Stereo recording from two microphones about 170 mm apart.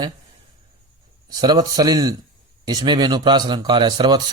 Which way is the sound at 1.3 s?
25° right (ahead or behind).